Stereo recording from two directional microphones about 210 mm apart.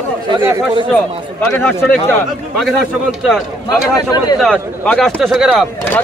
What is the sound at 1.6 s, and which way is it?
A man's voice, 5° left (ahead or behind).